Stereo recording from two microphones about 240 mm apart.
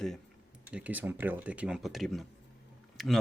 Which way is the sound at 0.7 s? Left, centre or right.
Centre.